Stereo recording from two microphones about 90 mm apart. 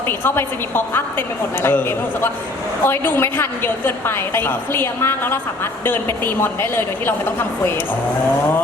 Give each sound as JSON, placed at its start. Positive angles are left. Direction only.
{"t": 0.1, "sound": "a woman's voice", "side_deg": 25}